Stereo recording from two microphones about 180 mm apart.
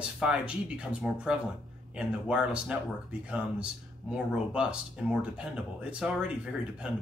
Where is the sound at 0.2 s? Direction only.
5° right (ahead or behind).